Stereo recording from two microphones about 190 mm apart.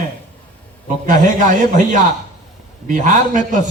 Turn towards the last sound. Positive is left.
turn(degrees=-40)  # may be behind; listen again after turning